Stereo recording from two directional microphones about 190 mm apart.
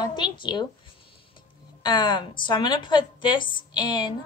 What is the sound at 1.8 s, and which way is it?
A woman's voice, 25° left (ahead or behind).